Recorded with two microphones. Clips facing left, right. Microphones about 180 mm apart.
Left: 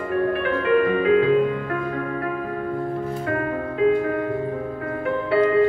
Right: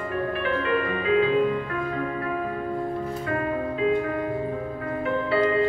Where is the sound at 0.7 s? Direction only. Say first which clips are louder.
Left 8 dB; 55° left (ahead or behind).